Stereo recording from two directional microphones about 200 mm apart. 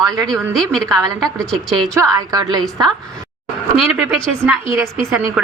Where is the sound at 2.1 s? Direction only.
20° right (ahead or behind).